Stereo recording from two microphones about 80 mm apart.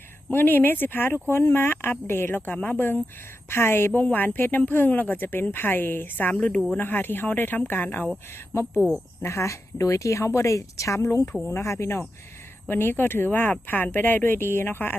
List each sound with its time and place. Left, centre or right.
0.3 s speech: left
9.2 s a woman's voice: left